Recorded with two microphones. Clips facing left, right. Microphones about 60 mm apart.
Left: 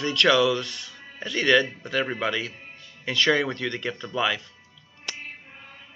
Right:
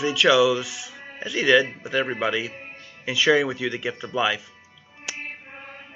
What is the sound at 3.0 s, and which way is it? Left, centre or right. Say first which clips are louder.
Speech: right 3 dB; centre.